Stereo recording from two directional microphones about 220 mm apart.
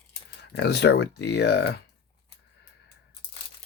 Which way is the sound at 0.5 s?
50° left (ahead or behind).